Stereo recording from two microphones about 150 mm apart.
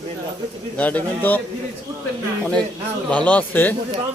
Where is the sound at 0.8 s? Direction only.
10° left (ahead or behind).